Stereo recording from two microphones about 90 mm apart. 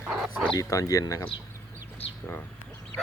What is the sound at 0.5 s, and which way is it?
Speech, 40° left (ahead or behind).